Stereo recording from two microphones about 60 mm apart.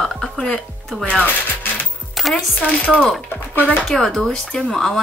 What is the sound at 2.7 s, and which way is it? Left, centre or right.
Chopping, left.